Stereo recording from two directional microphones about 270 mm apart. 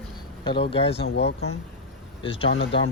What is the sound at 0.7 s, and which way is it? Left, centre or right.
Speech, left.